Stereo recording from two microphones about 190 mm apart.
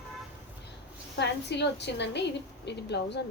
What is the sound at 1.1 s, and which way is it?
A woman's voice, 65° left (ahead or behind).